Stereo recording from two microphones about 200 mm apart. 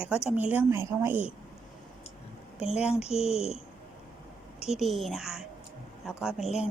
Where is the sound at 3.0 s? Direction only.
30° left (ahead or behind).